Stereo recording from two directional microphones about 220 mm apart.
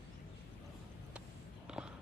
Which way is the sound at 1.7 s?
5° right (ahead or behind).